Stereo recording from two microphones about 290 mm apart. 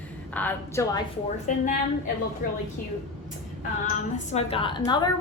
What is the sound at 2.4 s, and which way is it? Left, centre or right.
Speech, left.